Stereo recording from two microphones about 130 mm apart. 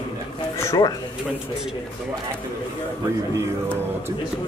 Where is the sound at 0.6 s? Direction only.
25° left (ahead or behind).